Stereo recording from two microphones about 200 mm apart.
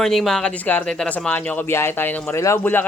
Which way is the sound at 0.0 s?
Centre (ahead or behind).